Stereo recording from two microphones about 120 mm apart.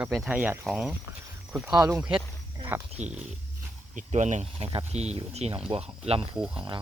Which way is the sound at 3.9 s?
85° right.